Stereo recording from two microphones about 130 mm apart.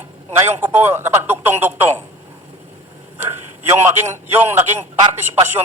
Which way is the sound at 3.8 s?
15° right (ahead or behind).